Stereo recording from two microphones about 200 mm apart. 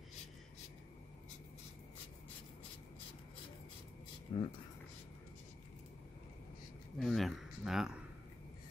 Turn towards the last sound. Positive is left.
turn(degrees=0)  # may be behind; listen again after turning